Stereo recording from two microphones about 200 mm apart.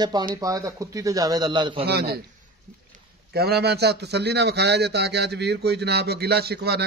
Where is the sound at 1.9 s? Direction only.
50° right (ahead or behind).